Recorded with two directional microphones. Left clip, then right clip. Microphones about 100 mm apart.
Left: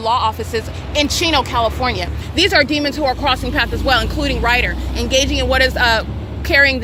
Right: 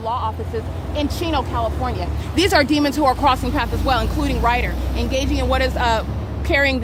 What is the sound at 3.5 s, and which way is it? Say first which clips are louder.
Speech: left 4 dB; 15° right (ahead or behind).